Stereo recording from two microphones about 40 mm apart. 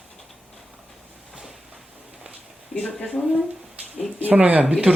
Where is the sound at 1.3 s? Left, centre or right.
Centre.